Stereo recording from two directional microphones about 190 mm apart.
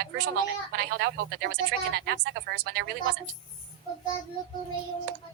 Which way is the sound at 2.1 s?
55° right (ahead or behind).